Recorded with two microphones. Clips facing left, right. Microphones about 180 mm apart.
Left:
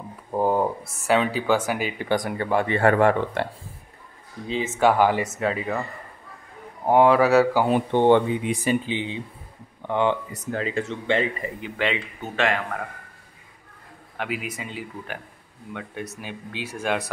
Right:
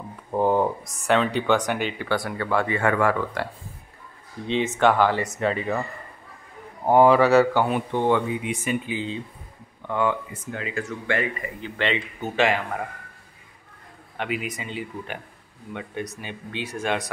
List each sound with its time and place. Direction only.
0.3 s speech: 5° left (ahead or behind)
2.0 s speech: 15° left (ahead or behind)
4.5 s speech: 5° left (ahead or behind)
6.9 s speech: centre (ahead or behind)
7.6 s speech: 30° left (ahead or behind)
10.3 s speech: 35° left (ahead or behind)
11.7 s speech: centre (ahead or behind)
14.1 s speech: 5° left (ahead or behind)